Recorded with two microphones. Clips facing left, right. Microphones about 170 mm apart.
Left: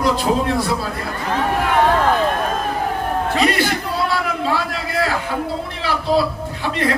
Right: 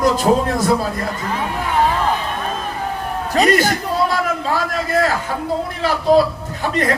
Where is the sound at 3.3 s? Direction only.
45° right (ahead or behind).